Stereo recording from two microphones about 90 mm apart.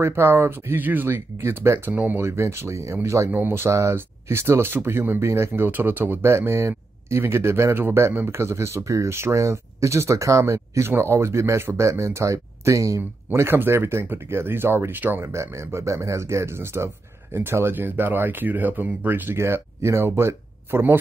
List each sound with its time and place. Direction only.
0.0 s speech: 25° right (ahead or behind)
3.3 s speech: 20° right (ahead or behind)